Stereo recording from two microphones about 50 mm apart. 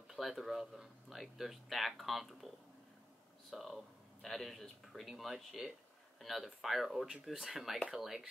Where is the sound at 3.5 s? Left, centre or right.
Centre.